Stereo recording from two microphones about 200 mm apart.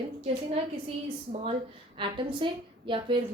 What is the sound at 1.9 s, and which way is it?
A woman's voice, 25° right (ahead or behind).